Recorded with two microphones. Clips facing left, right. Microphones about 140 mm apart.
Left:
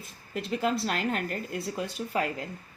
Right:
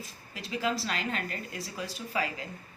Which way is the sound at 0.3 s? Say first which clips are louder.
Left 4 dB; 55° left (ahead or behind).